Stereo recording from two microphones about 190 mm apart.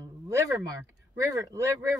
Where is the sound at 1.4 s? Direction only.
15° right (ahead or behind).